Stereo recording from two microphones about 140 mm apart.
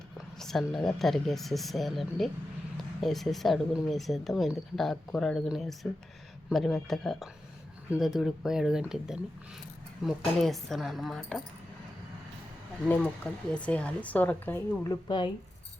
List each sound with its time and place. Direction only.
0.3 s speech: 5° left (ahead or behind)
13.2 s speech: 5° left (ahead or behind)
14.8 s a woman's voice: 30° left (ahead or behind)